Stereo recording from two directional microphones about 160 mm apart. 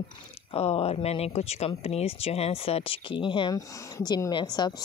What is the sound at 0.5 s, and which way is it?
Speech, 35° left (ahead or behind).